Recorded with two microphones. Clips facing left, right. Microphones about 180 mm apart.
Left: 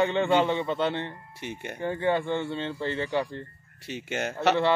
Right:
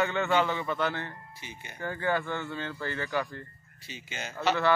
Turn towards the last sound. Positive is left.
turn(degrees=70)  # may be behind; listen again after turning